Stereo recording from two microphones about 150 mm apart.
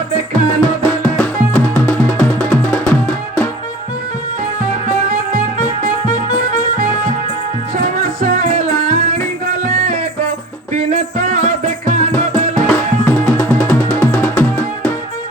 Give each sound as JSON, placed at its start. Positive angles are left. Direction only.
{"t": 0.6, "sound": "music", "side_deg": 10}
{"t": 6.5, "sound": "harmonica", "side_deg": -65}
{"t": 8.5, "sound": "music", "side_deg": -50}
{"t": 12.1, "sound": "music", "side_deg": 10}